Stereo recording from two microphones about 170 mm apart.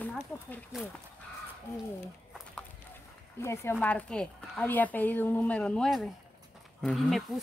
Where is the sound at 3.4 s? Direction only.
15° left (ahead or behind).